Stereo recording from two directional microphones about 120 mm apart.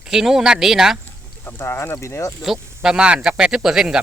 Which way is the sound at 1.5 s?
20° left (ahead or behind).